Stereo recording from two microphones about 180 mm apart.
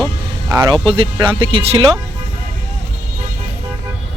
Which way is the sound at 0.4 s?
20° right (ahead or behind).